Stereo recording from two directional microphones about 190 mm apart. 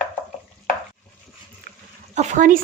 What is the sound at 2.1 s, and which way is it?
Speech, 40° right (ahead or behind).